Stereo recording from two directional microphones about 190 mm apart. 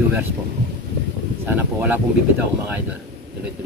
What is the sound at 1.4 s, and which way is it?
Speech, 10° right (ahead or behind).